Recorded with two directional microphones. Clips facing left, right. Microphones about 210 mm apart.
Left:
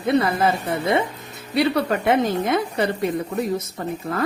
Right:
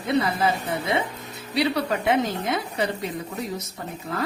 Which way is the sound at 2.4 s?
55° left (ahead or behind).